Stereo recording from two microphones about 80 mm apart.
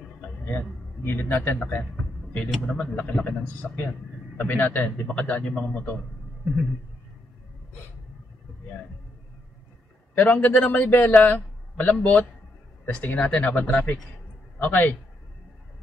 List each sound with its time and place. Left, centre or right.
0.5 s a man's voice: left
2.6 s a man's voice: centre
10.1 s a man's voice: left